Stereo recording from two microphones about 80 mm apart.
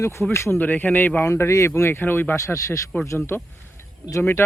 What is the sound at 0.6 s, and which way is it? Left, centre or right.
Speech, left.